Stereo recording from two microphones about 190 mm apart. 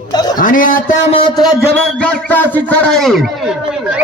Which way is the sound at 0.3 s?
45° left (ahead or behind).